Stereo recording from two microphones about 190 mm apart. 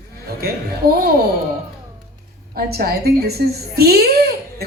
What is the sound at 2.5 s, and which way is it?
A woman's voice, 55° right (ahead or behind).